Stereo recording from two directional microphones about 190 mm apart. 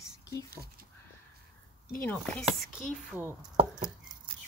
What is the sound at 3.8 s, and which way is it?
Chopping, 20° right (ahead or behind).